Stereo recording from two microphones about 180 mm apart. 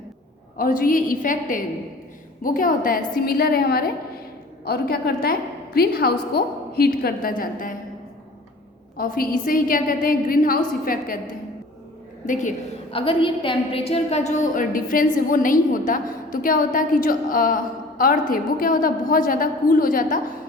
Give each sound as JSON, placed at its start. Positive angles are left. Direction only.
{"t": 0.5, "sound": "a woman's voice", "side_deg": 50}
{"t": 9.0, "sound": "a woman's voice", "side_deg": 50}
{"t": 12.2, "sound": "a woman's voice", "side_deg": 45}
{"t": 12.9, "sound": "a woman's voice", "side_deg": 30}